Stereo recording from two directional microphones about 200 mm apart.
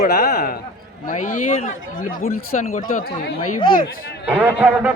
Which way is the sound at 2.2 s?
90° left.